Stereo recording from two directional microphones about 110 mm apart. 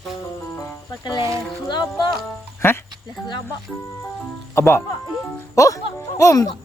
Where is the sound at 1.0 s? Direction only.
40° left (ahead or behind).